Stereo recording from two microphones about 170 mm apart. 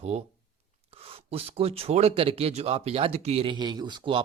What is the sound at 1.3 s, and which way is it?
Speech, 35° right (ahead or behind).